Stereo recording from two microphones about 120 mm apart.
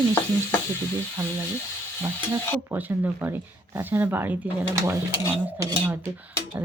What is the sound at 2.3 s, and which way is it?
Speech, 20° right (ahead or behind).